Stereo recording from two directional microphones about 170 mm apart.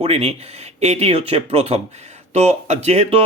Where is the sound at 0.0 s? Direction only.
35° right (ahead or behind).